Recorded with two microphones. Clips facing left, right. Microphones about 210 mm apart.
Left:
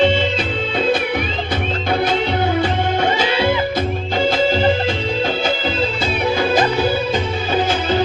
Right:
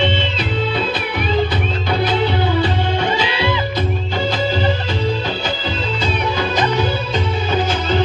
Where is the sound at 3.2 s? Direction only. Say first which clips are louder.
Left 3 dB; 45° left (ahead or behind).